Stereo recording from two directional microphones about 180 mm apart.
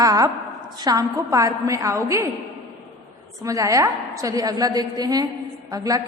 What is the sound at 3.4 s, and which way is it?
A woman's voice, 20° right (ahead or behind).